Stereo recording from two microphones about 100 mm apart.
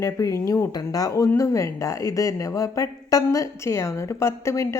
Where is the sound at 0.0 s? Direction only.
30° left (ahead or behind).